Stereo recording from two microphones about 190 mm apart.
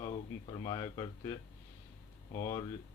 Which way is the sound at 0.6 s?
20° left (ahead or behind).